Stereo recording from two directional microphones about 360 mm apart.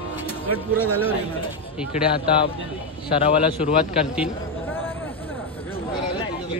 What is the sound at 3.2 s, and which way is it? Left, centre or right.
Speech, centre.